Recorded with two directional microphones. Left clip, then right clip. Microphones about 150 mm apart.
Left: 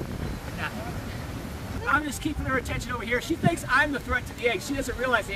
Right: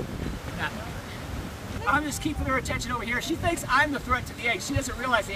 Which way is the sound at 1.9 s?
25° right (ahead or behind).